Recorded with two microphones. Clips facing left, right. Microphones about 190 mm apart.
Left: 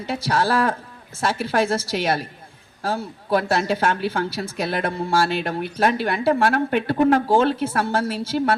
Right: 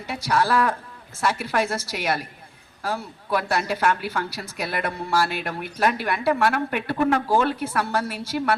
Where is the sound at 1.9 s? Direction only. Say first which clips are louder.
Left 4 dB; 25° left (ahead or behind).